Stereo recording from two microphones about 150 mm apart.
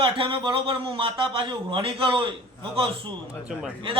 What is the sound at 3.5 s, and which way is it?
Speech, 5° right (ahead or behind).